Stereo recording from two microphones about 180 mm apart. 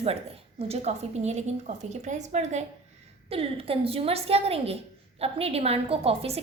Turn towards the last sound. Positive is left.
turn(degrees=-30)  # may be behind; listen again after turning